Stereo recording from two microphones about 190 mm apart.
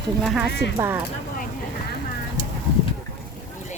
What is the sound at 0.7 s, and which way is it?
Speech, 10° right (ahead or behind).